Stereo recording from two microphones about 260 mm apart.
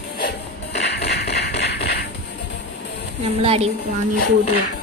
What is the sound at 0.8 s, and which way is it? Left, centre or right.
Tap, left.